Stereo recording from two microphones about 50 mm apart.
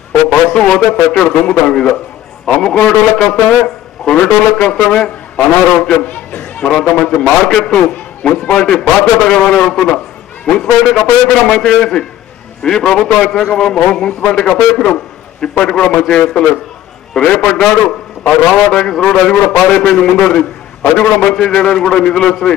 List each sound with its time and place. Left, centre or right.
0.5 s a man's voice: left
5.4 s a man's voice: left
6.7 s a man's voice: centre
20.8 s a man's voice: left
21.2 s a man's voice: centre